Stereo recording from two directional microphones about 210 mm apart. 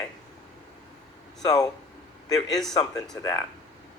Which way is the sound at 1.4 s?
20° left (ahead or behind).